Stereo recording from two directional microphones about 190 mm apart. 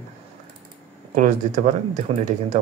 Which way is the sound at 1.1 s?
40° right (ahead or behind).